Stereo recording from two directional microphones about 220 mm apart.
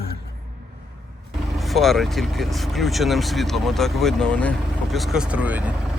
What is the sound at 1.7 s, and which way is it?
Speech, centre (ahead or behind).